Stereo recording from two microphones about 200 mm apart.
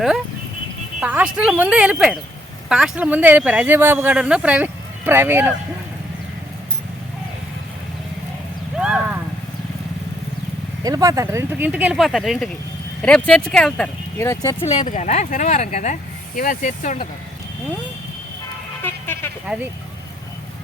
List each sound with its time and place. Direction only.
0.9 s speech: 5° right (ahead or behind)
8.8 s vehicle: 5° right (ahead or behind)
10.8 s speech: 15° right (ahead or behind); by 14.8 s 20° left (ahead or behind)
14.8 s speech: 40° left (ahead or behind)
18.8 s vehicle: 10° left (ahead or behind)